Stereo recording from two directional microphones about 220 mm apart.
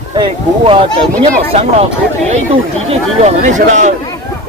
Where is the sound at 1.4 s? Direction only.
25° right (ahead or behind).